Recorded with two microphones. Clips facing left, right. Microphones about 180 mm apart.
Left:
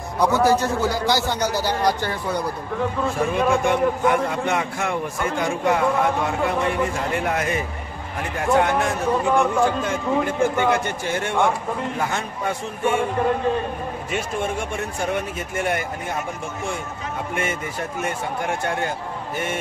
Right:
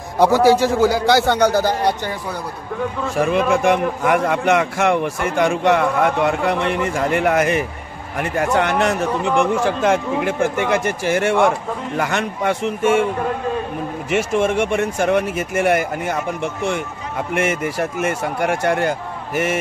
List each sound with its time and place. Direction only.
0.2 s a man's voice: 90° right; by 1.8 s 50° right (ahead or behind)
1.8 s speech: 25° right (ahead or behind)
3.2 s a man's voice: 90° right
14.1 s a man's voice: 80° right
17.4 s a man's voice: 85° right